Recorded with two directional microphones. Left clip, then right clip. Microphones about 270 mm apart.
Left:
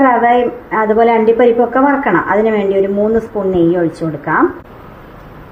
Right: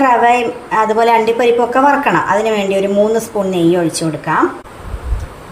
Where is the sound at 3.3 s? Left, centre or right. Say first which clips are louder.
Even; right.